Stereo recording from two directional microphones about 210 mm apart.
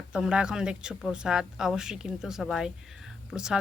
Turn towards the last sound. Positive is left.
turn(degrees=-5)  # may be behind; listen again after turning